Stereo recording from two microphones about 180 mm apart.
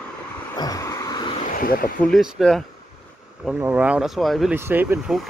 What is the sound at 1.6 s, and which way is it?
Speech, 55° left (ahead or behind).